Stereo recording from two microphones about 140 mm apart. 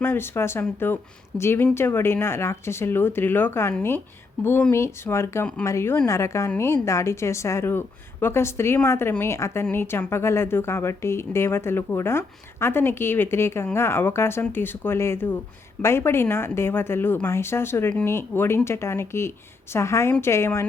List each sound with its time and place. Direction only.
0.0 s a woman's voice: 15° left (ahead or behind)